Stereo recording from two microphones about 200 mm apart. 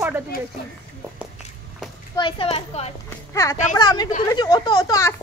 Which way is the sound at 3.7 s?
20° left (ahead or behind).